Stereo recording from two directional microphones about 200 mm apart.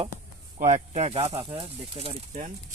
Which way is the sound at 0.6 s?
35° right (ahead or behind).